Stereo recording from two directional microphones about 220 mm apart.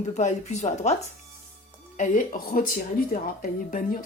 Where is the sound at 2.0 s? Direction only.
35° left (ahead or behind).